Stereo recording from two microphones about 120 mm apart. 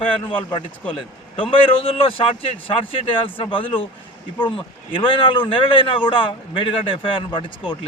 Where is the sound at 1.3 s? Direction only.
50° left (ahead or behind).